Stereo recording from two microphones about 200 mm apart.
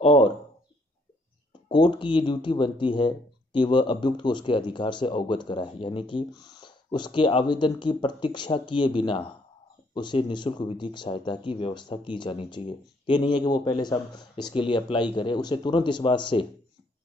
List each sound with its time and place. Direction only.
0.0 s speech: 25° left (ahead or behind)
1.7 s speech: 25° left (ahead or behind)